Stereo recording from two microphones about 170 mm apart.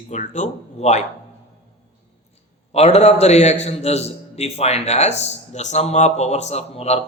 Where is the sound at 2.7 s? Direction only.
40° left (ahead or behind).